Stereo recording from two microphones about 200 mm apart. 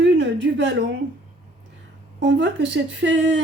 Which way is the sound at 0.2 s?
65° right (ahead or behind).